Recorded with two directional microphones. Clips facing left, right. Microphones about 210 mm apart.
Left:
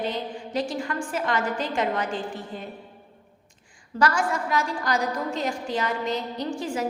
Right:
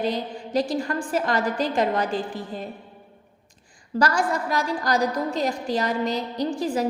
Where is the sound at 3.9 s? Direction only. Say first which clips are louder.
Right 1 dB; 40° right (ahead or behind).